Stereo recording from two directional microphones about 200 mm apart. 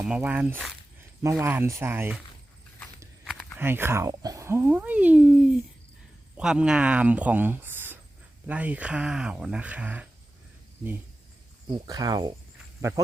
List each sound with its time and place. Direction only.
0.0 s speech: 5° right (ahead or behind)
3.6 s speech: 10° right (ahead or behind)
11.7 s speech: 20° right (ahead or behind)